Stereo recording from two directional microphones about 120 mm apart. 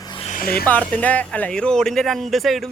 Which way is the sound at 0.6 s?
10° left (ahead or behind).